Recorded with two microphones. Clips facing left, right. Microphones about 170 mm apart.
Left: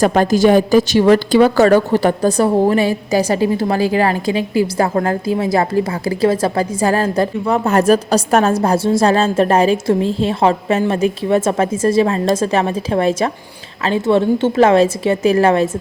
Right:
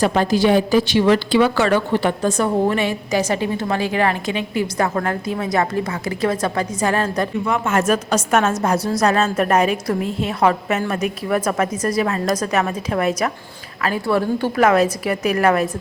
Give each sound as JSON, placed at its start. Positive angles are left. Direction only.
{"t": 0.0, "sound": "a woman's voice", "side_deg": 45}